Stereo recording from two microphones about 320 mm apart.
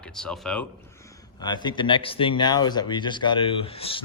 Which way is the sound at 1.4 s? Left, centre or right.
Centre.